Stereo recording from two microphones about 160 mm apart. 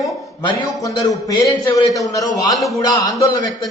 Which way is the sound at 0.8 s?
20° left (ahead or behind).